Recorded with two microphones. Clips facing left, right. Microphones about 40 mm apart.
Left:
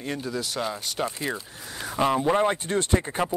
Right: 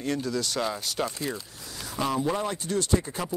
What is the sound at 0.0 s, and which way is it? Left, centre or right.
Speech, centre.